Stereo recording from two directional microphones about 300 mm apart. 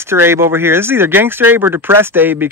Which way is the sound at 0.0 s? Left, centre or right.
Centre.